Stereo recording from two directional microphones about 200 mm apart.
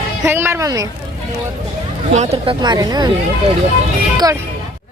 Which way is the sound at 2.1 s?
25° right (ahead or behind).